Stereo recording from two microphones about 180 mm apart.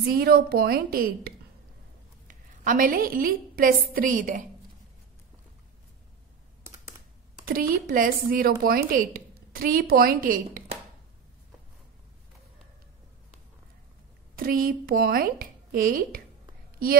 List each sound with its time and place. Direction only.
0.2 s a woman's voice: 55° right (ahead or behind)
7.4 s a woman's voice: 55° right (ahead or behind)
14.3 s speech: 55° right (ahead or behind)